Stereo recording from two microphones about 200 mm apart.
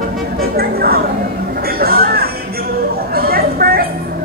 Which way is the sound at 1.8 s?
50° right (ahead or behind).